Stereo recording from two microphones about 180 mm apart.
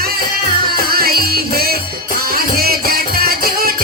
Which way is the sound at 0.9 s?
55° right (ahead or behind).